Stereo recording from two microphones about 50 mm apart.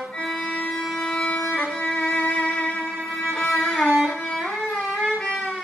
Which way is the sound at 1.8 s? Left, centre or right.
Left.